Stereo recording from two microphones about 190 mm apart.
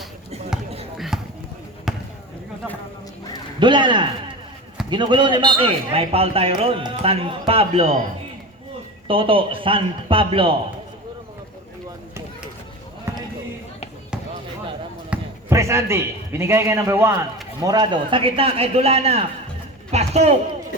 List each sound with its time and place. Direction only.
0.9 s basketball bounce: centre (ahead or behind)
3.6 s a man's voice: 25° right (ahead or behind)
9.0 s a man's voice: 25° right (ahead or behind)
13.1 s basketball bounce: 15° right (ahead or behind)
15.1 s a man's voice: 15° right (ahead or behind); by 20.3 s 35° right (ahead or behind)